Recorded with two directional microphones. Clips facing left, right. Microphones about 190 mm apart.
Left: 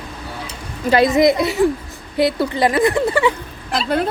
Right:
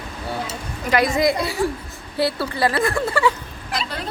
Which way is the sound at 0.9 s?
25° left (ahead or behind).